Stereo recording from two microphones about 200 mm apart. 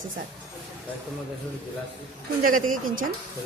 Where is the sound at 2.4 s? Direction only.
45° right (ahead or behind).